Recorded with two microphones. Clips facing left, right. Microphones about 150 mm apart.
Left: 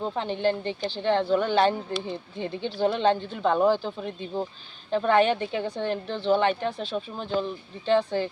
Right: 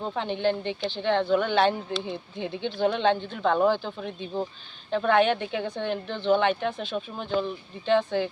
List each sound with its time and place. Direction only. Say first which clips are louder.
0.1 s speech: right 2 dB; 5° left (ahead or behind)
0.7 s speech: even; 35° left (ahead or behind)
1.0 s speech: even; centre (ahead or behind)
2.6 s speech: right 2 dB; 35° left (ahead or behind)
2.8 s a woman's voice: left 1 dB; centre (ahead or behind)
6.7 s speech: even; 35° left (ahead or behind)
6.9 s speech: even; 5° right (ahead or behind)